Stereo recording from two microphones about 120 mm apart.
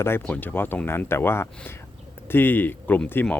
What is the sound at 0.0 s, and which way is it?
Speech, 15° left (ahead or behind).